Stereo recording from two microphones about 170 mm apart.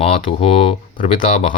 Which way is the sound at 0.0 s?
35° left (ahead or behind).